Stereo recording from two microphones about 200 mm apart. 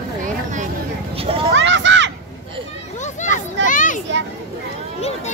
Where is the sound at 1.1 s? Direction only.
30° right (ahead or behind).